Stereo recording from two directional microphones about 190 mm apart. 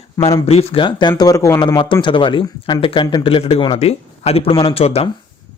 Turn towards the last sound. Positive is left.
turn(degrees=30)  # may be behind; listen again after turning